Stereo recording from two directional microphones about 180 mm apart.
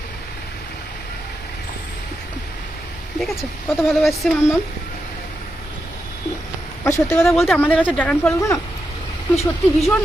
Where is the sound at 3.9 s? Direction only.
Centre (ahead or behind).